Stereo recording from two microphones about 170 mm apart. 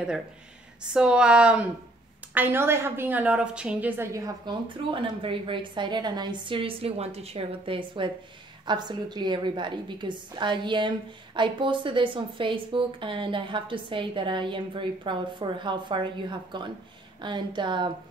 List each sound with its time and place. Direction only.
0.9 s a woman's voice: 5° right (ahead or behind); by 17.9 s 25° right (ahead or behind)